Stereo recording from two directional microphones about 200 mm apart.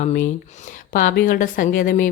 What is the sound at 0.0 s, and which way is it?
A woman's voice, 40° left (ahead or behind).